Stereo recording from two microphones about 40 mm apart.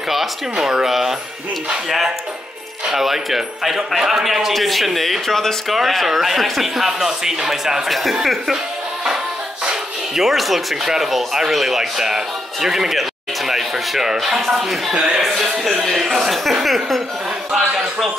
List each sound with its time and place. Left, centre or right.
0.1 s a man's voice: centre
0.7 s a man's voice: centre
5.7 s speech: centre
7.8 s a man's voice: centre
9.7 s a man's voice: centre